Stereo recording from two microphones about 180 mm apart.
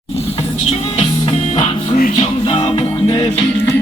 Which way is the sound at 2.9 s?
20° left (ahead or behind).